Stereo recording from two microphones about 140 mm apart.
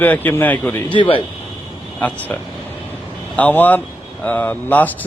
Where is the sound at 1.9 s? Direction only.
10° left (ahead or behind).